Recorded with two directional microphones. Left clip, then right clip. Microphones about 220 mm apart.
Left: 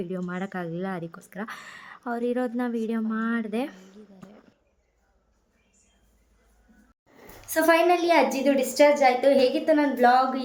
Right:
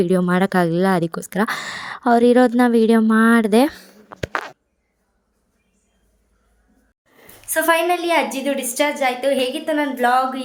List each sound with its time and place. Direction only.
0.0 s a woman's voice: 45° right (ahead or behind)
3.7 s a sound: 25° right (ahead or behind)
7.4 s a woman's voice: centre (ahead or behind)